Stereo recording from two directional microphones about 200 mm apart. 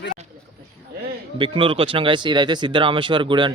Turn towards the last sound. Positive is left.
turn(degrees=-25)  # may be behind; listen again after turning